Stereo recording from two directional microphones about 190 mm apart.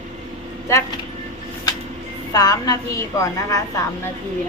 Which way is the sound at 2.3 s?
20° left (ahead or behind).